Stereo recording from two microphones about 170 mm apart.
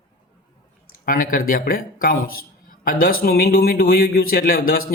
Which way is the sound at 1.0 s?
55° left (ahead or behind).